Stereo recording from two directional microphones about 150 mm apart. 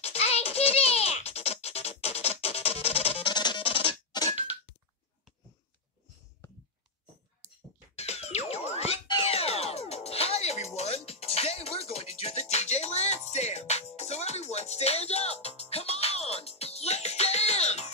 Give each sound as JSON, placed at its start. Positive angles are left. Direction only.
{"t": 0.0, "sound": "music", "side_deg": 45}
{"t": 7.9, "sound": "music", "side_deg": 45}